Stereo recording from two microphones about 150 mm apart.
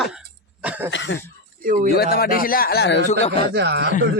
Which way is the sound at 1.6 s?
60° right (ahead or behind).